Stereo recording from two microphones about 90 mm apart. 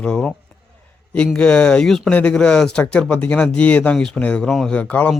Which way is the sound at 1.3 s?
10° left (ahead or behind).